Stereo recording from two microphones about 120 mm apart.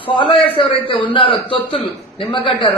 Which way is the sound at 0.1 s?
45° left (ahead or behind).